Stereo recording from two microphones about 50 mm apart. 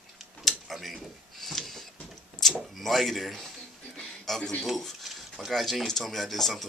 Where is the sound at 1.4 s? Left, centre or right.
Centre.